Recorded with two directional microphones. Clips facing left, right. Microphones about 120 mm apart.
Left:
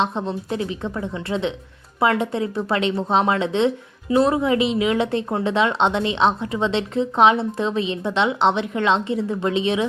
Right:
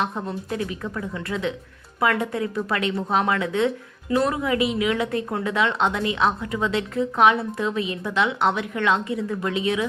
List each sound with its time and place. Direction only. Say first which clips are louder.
0.0 s speech: left 4 dB; 25° left (ahead or behind)